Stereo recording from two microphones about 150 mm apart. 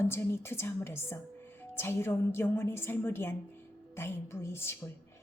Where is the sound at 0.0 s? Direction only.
15° left (ahead or behind).